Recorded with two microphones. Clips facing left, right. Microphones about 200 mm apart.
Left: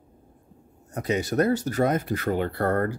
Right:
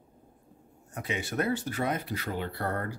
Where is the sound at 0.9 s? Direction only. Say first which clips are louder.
Left 8 dB; 40° left (ahead or behind).